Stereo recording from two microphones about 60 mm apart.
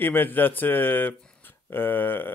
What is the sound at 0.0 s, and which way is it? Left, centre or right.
Speech, left.